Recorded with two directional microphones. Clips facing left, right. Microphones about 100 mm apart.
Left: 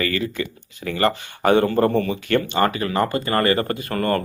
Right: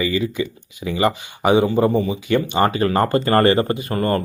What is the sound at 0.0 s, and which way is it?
Speech, 15° right (ahead or behind).